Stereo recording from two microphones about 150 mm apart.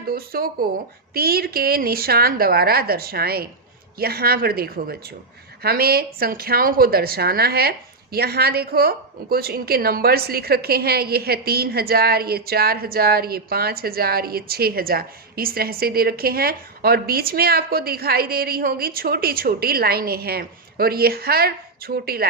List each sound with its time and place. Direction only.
0.1 s a woman's voice: 85° right